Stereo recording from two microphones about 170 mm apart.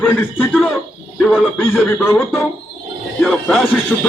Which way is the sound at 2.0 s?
15° left (ahead or behind).